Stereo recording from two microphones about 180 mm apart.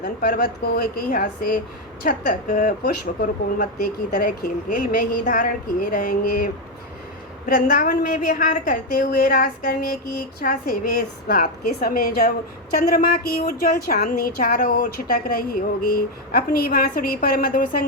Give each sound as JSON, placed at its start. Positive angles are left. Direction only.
{"t": 0.0, "sound": "a woman's voice", "side_deg": 50}